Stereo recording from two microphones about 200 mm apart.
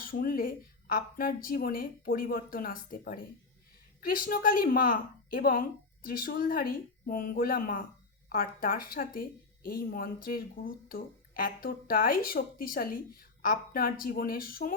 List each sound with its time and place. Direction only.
0.0 s speech: 45° left (ahead or behind)